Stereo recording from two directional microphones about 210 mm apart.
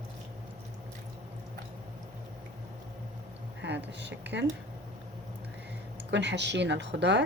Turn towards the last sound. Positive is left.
turn(degrees=-55)  # may be behind; listen again after turning